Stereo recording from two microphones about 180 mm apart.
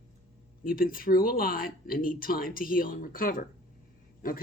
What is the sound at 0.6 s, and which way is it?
Speech, 55° left (ahead or behind).